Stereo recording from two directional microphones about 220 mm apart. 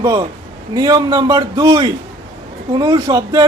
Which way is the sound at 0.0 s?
15° right (ahead or behind).